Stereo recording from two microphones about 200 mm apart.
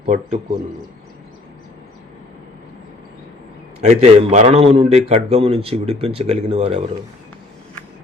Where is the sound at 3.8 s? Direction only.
35° right (ahead or behind).